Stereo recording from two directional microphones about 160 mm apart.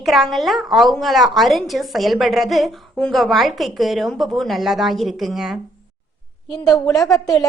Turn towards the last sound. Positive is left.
turn(degrees=20)  # may be behind; listen again after turning